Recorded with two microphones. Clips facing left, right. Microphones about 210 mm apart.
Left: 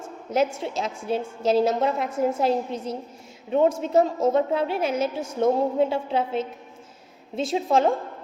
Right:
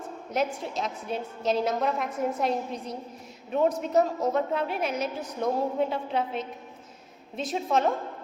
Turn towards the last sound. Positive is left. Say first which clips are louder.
# left 4 dB
turn(degrees=30)  # may be behind; listen again after turning